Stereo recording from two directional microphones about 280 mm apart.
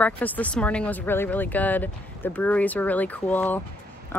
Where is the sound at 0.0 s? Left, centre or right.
Centre.